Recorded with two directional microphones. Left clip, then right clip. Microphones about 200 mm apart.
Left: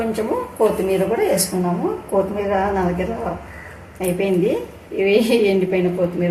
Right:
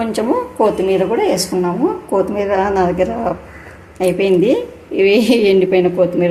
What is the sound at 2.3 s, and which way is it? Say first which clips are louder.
Speech: right 4 dB; 50° right (ahead or behind).